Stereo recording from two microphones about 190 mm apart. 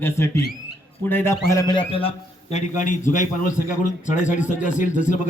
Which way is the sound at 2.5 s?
40° left (ahead or behind).